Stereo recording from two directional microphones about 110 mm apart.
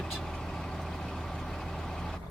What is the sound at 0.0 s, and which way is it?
Vehicle, 5° left (ahead or behind).